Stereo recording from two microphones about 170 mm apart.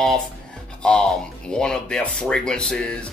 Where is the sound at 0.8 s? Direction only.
5° left (ahead or behind).